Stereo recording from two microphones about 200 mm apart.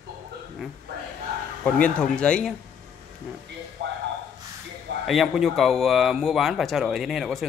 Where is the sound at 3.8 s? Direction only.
65° right (ahead or behind).